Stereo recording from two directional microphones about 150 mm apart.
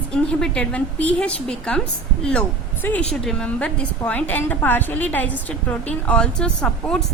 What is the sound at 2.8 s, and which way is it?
A woman's voice, 10° left (ahead or behind).